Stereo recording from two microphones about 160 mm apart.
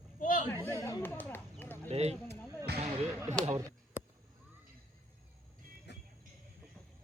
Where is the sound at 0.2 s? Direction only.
55° left (ahead or behind).